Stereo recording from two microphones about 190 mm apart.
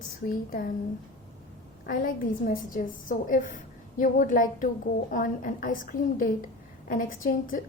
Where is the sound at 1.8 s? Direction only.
50° left (ahead or behind).